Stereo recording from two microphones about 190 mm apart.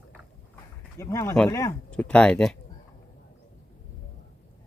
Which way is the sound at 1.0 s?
15° left (ahead or behind).